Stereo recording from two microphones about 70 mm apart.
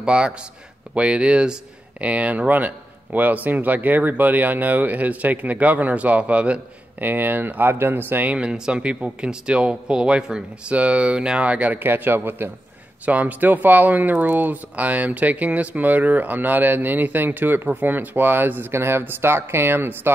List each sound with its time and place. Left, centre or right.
0.0 s a man's voice: centre; by 20.1 s right